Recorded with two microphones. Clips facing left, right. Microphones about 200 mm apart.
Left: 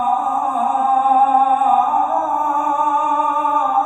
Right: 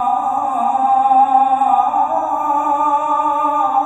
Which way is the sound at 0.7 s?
15° right (ahead or behind).